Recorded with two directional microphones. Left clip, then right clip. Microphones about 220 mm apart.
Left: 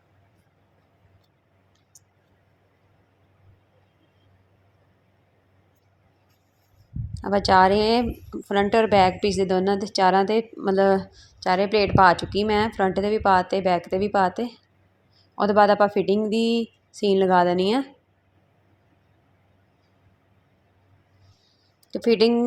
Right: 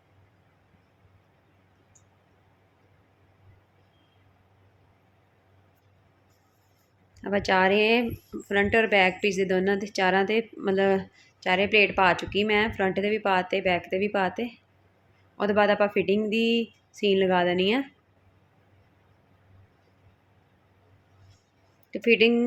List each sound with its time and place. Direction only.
7.2 s a woman's voice: 15° left (ahead or behind)
21.9 s speech: 5° right (ahead or behind)